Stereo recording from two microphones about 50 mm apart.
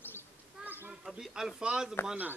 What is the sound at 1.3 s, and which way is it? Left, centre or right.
Speech, centre.